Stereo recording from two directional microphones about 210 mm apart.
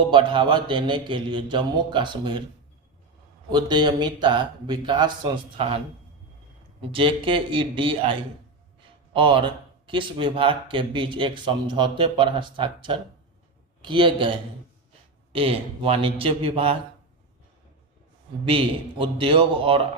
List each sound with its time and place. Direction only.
0.0 s speech: 25° right (ahead or behind)
3.5 s speech: 20° right (ahead or behind)
6.9 s speech: 25° right (ahead or behind)
18.4 s speech: 25° right (ahead or behind)